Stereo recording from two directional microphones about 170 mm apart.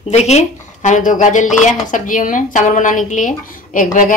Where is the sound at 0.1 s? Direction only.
40° left (ahead or behind).